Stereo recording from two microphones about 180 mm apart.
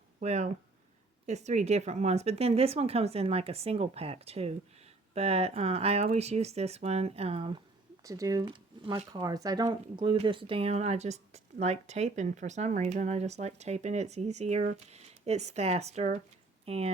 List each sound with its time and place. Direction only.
0.2 s speech: 40° right (ahead or behind)
8.0 s speech: 20° right (ahead or behind); by 16.9 s 35° right (ahead or behind)